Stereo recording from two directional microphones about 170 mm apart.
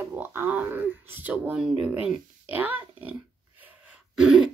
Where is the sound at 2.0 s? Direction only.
10° right (ahead or behind).